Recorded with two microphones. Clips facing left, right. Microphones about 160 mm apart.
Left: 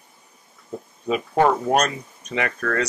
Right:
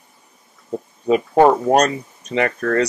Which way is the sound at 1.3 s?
35° right (ahead or behind).